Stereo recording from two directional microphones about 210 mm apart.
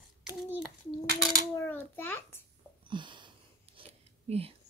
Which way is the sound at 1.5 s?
10° left (ahead or behind).